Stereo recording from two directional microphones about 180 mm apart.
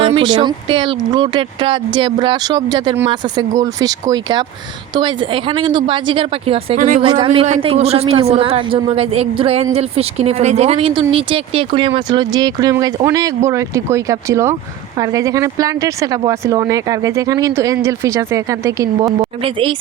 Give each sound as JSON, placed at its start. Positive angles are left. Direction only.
{"t": 0.0, "sound": "speech", "side_deg": -25}
{"t": 6.7, "sound": "a woman's voice", "side_deg": -45}
{"t": 7.0, "sound": "a woman's voice", "side_deg": -30}